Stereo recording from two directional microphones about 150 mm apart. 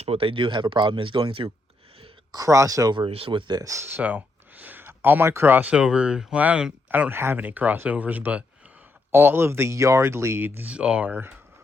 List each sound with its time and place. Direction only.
0.0 s speech: 40° right (ahead or behind)
2.3 s speech: 20° right (ahead or behind)